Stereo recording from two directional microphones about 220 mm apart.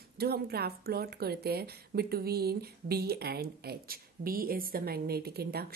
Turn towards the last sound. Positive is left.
turn(degrees=-45)  # may be behind; listen again after turning